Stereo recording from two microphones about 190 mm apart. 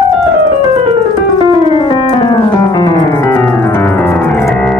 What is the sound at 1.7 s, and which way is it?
Music, 25° left (ahead or behind).